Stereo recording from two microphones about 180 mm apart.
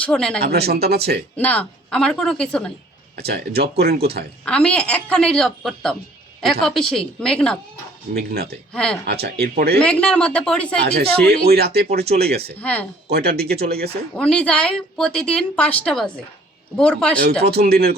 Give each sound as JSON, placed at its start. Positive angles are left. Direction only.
{"t": 0.0, "sound": "speech", "side_deg": 5}
{"t": 0.4, "sound": "speech", "side_deg": -65}
{"t": 1.4, "sound": "speech", "side_deg": 10}
{"t": 3.2, "sound": "speech", "side_deg": -60}
{"t": 4.4, "sound": "speech", "side_deg": 5}
{"t": 8.1, "sound": "speech", "side_deg": -60}
{"t": 8.7, "sound": "speech", "side_deg": 5}
{"t": 9.0, "sound": "speech", "side_deg": -65}
{"t": 9.7, "sound": "speech", "side_deg": 5}
{"t": 10.8, "sound": "speech", "side_deg": -60}
{"t": 12.6, "sound": "speech", "side_deg": 10}
{"t": 13.1, "sound": "speech", "side_deg": -60}
{"t": 14.2, "sound": "speech", "side_deg": 5}
{"t": 17.4, "sound": "speech", "side_deg": -60}